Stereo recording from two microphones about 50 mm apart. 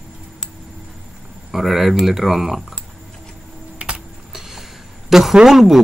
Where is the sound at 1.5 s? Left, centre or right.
Centre.